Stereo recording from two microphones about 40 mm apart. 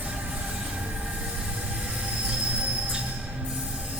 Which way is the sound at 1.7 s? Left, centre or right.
Right.